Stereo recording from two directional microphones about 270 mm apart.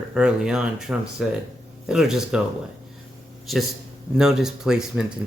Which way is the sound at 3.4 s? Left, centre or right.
Centre.